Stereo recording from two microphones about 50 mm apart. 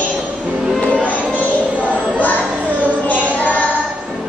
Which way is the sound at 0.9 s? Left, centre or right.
Left.